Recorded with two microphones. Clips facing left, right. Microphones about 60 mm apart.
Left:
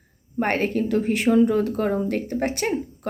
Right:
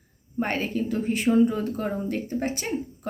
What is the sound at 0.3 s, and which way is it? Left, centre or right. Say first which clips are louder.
Speech: left 4 dB; left.